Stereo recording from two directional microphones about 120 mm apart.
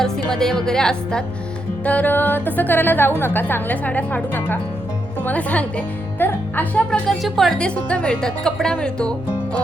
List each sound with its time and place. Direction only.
0.0 s a woman's voice: 5° left (ahead or behind)
7.2 s a woman's voice: centre (ahead or behind)